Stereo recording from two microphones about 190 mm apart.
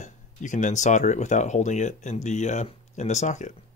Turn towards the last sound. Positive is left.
turn(degrees=40)  # may be behind; listen again after turning